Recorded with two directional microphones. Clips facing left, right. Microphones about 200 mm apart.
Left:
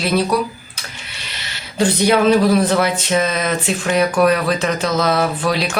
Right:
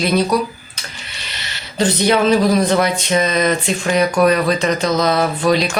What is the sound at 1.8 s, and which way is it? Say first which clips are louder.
Speech: even; 10° left (ahead or behind).